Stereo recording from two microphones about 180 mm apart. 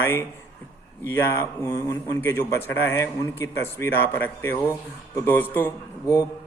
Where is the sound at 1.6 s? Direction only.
15° left (ahead or behind).